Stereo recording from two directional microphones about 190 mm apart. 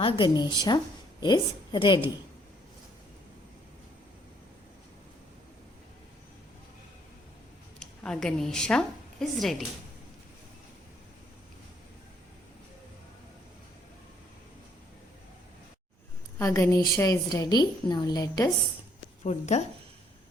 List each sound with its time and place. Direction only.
0.0 s a woman's voice: 25° left (ahead or behind)
7.8 s a woman's voice: 5° left (ahead or behind)
16.4 s a woman's voice: 15° left (ahead or behind)
19.2 s a woman's voice: 35° left (ahead or behind)